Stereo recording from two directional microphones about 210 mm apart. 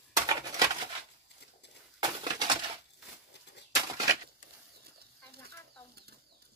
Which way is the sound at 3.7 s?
20° right (ahead or behind).